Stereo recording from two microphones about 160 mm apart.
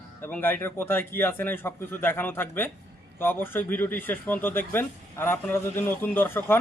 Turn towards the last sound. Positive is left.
turn(degrees=10)  # may be behind; listen again after turning